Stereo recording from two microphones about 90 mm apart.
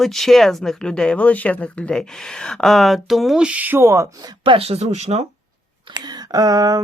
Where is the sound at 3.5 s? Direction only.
20° right (ahead or behind).